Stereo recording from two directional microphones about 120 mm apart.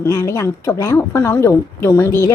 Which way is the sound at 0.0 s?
25° left (ahead or behind).